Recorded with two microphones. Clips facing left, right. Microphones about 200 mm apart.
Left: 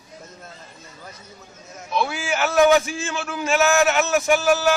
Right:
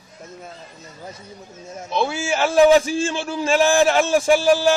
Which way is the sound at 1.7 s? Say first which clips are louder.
Right 2 dB; 25° right (ahead or behind).